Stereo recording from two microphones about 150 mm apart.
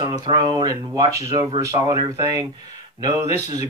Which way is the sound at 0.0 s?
25° right (ahead or behind).